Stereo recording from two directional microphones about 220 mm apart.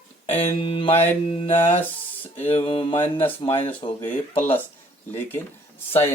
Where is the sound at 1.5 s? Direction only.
10° left (ahead or behind).